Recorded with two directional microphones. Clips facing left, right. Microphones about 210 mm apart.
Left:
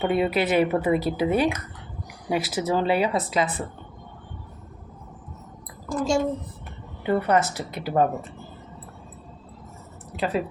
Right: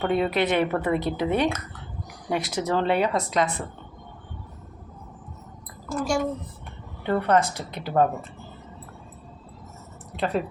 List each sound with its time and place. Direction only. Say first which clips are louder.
0.0 s speech: left 1 dB; 5° left (ahead or behind)
5.9 s a woman's voice: left 2 dB; 20° left (ahead or behind)
7.0 s speech: even; 10° left (ahead or behind)
10.2 s speech: even; 5° left (ahead or behind)